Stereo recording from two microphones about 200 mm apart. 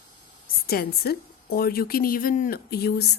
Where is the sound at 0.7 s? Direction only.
50° left (ahead or behind).